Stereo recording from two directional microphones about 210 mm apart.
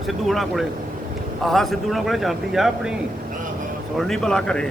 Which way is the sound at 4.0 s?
Centre (ahead or behind).